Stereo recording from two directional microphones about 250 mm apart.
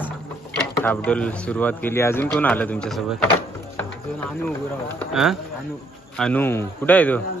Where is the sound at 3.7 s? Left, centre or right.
Centre.